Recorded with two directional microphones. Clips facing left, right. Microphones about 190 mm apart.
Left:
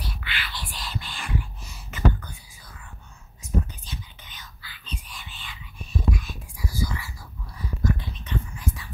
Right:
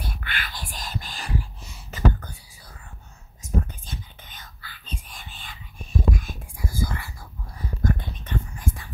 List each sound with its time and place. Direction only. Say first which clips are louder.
0.0 s whispering: right 1 dB; 50° right (ahead or behind)
3.4 s whispering: right 1 dB; 50° right (ahead or behind)
7.5 s a sound: right 1 dB; 50° right (ahead or behind)